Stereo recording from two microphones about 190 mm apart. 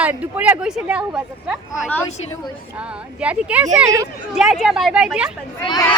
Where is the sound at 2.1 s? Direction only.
35° left (ahead or behind).